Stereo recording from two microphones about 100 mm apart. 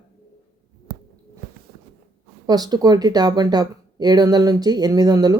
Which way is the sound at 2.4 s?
40° right (ahead or behind).